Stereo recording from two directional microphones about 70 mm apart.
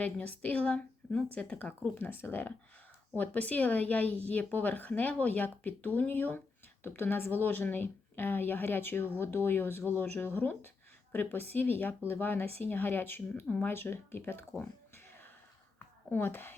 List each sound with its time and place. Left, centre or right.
0.0 s a woman's voice: centre
2.0 s a woman's voice: left
14.9 s whispering: left
16.0 s speech: left